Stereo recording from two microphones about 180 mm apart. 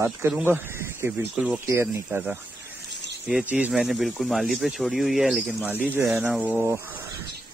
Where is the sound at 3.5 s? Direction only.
5° right (ahead or behind).